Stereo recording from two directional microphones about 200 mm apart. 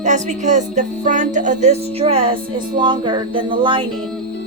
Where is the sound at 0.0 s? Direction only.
35° right (ahead or behind).